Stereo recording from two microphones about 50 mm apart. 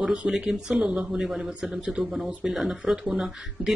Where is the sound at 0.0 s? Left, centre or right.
Right.